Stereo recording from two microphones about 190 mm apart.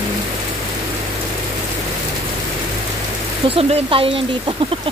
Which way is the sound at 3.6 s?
30° right (ahead or behind).